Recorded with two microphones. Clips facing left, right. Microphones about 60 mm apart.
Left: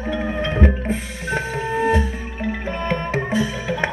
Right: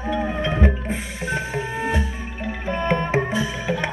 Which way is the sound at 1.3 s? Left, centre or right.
Left.